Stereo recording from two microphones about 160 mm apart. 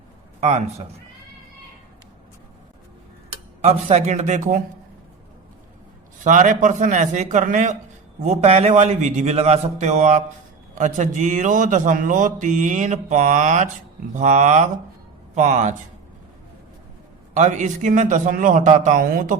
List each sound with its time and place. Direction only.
0.3 s a man's voice: 40° right (ahead or behind)
3.6 s speech: 45° right (ahead or behind)
6.1 s speech: 50° right (ahead or behind)
17.3 s speech: 50° right (ahead or behind)